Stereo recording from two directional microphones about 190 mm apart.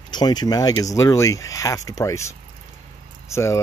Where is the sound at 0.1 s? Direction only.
20° left (ahead or behind).